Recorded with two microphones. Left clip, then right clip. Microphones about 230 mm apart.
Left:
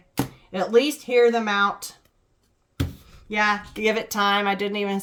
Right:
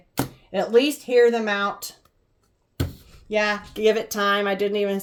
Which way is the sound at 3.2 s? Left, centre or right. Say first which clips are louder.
Left 1 dB; centre.